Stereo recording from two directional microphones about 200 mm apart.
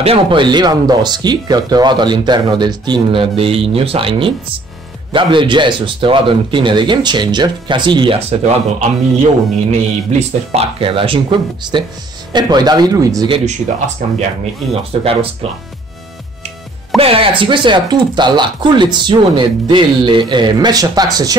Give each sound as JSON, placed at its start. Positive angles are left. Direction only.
{"t": 0.0, "sound": "speech", "side_deg": -25}
{"t": 14.0, "sound": "speech", "side_deg": -40}
{"t": 14.4, "sound": "speech", "side_deg": -30}
{"t": 16.9, "sound": "speech", "side_deg": -30}